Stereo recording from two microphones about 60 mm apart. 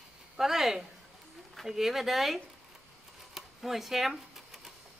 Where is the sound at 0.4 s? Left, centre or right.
Centre.